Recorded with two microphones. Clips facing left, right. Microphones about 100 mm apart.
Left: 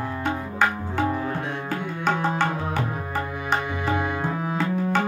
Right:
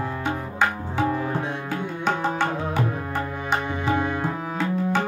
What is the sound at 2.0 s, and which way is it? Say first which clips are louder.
Music: left 1 dB; centre (ahead or behind).